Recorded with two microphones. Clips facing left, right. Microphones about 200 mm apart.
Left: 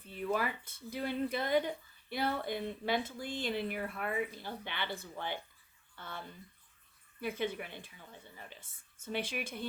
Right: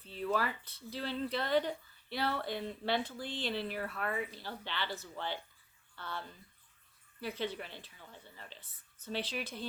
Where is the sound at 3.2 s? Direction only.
45° left (ahead or behind).